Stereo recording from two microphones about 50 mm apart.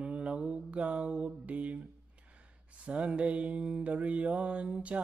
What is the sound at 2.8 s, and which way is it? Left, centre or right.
Mantra, right.